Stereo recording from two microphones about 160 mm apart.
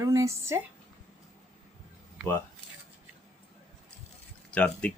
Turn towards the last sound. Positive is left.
turn(degrees=10)  # may be behind; listen again after turning